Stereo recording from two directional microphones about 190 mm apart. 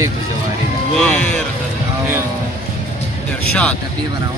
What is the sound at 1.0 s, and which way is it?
Speech, 5° left (ahead or behind).